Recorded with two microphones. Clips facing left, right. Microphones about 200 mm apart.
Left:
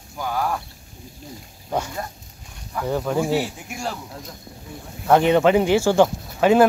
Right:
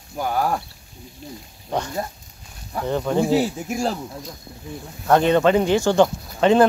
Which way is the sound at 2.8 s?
5° left (ahead or behind).